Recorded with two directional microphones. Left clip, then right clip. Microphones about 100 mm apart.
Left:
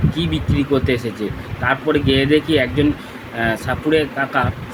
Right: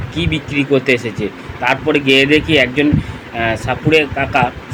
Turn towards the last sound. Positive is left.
turn(degrees=-15)  # may be behind; listen again after turning